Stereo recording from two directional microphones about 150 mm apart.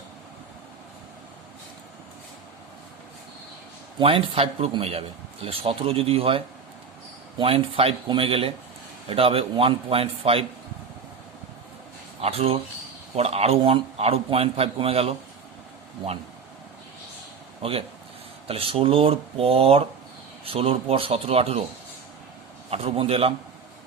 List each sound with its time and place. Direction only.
3.9 s a man's voice: 35° right (ahead or behind)
12.2 s a man's voice: 40° right (ahead or behind)
17.6 s a man's voice: 40° right (ahead or behind)
22.7 s a man's voice: 40° right (ahead or behind)